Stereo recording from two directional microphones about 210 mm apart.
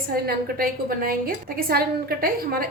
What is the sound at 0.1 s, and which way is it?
A woman's voice, 45° right (ahead or behind).